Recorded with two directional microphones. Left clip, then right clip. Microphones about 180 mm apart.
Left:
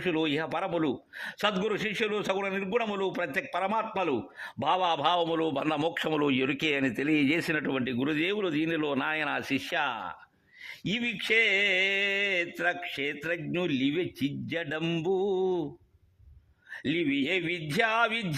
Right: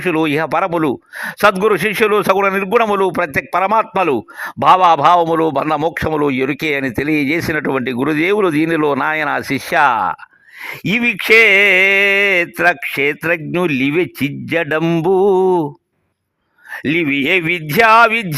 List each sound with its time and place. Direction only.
0.0 s a man's voice: 45° right (ahead or behind); by 7.6 s 25° right (ahead or behind)
7.6 s a man's voice: 40° right (ahead or behind); by 15.6 s 55° right (ahead or behind)
16.7 s a man's voice: 40° right (ahead or behind)